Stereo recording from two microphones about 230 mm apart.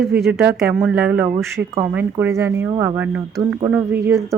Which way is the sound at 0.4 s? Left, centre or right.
Centre.